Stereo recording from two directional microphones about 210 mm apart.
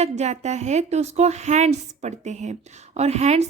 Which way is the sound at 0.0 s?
35° right (ahead or behind).